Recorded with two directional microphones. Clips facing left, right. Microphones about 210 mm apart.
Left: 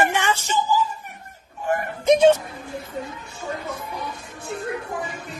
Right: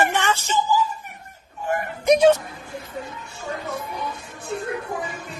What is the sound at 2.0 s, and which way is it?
Speech, 25° left (ahead or behind).